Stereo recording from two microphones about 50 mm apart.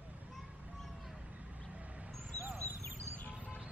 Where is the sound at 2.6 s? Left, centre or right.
Right.